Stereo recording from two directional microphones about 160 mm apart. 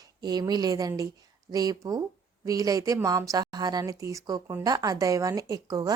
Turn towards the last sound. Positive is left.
turn(degrees=-25)  # may be behind; listen again after turning